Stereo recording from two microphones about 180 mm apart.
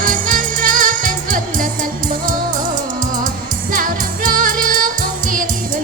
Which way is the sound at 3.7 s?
50° right (ahead or behind).